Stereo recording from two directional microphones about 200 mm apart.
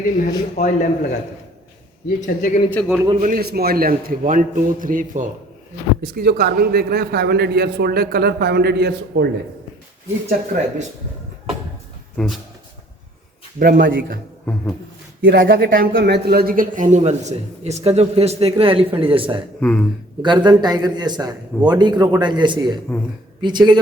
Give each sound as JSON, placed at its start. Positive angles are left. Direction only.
{"t": 0.0, "sound": "speech", "side_deg": 40}
{"t": 2.0, "sound": "speech", "side_deg": 40}
{"t": 2.8, "sound": "a man's voice", "side_deg": -5}
{"t": 3.2, "sound": "a man's voice", "side_deg": -45}
{"t": 10.2, "sound": "a man's voice", "side_deg": -35}
{"t": 12.1, "sound": "speech", "side_deg": 0}
{"t": 13.6, "sound": "a man's voice", "side_deg": -45}
{"t": 14.4, "sound": "a sound", "side_deg": 5}
{"t": 15.3, "sound": "a man's voice", "side_deg": -45}
{"t": 15.9, "sound": "a man's voice", "side_deg": -60}
{"t": 19.5, "sound": "a man's voice", "side_deg": 5}
{"t": 20.2, "sound": "a man's voice", "side_deg": -20}